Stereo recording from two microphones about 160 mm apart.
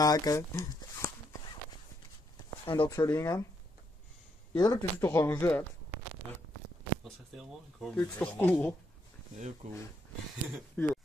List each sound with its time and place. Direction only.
0.0 s speech: 20° left (ahead or behind)
2.6 s speech: 25° left (ahead or behind)
4.6 s speech: 20° left (ahead or behind)
7.9 s speech: 10° left (ahead or behind)
9.6 s speech: 45° right (ahead or behind)
10.8 s speech: 10° left (ahead or behind)